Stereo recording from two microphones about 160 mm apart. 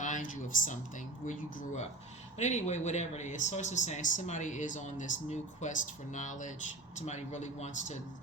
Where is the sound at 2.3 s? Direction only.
45° left (ahead or behind).